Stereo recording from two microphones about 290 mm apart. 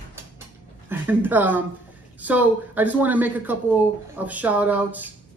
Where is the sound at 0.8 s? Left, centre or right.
Centre.